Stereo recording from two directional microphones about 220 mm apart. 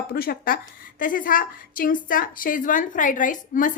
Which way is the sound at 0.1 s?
45° left (ahead or behind).